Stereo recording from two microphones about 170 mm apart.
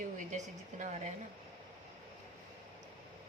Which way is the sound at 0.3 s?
45° right (ahead or behind).